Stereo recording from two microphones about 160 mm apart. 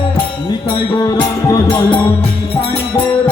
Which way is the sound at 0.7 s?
25° left (ahead or behind).